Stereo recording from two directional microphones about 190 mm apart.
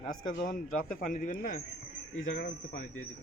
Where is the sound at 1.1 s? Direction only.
45° left (ahead or behind).